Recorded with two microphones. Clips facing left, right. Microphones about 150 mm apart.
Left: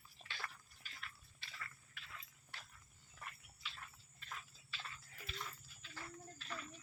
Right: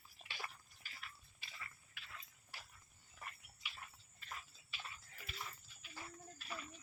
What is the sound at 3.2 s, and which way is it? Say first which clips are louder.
Cricket: even; 10° right (ahead or behind).